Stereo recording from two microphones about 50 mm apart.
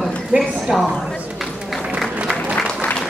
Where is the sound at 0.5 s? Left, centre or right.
Centre.